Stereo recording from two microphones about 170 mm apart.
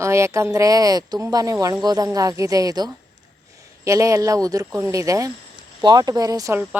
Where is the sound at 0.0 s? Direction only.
15° right (ahead or behind).